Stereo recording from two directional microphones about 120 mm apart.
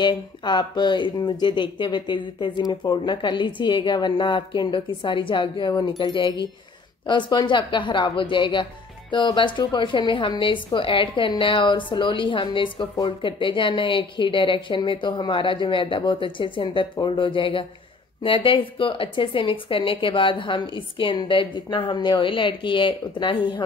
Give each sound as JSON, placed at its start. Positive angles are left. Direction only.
{"t": 0.0, "sound": "speech", "side_deg": 40}